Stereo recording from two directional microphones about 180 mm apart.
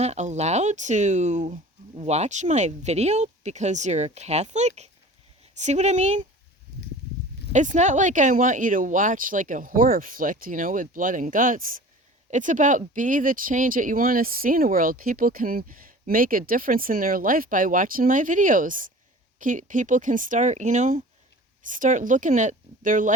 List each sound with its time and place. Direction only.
0.0 s speech: 40° right (ahead or behind)
7.5 s speech: 45° right (ahead or behind)